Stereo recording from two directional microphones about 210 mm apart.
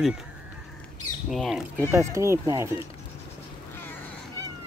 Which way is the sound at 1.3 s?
Centre (ahead or behind).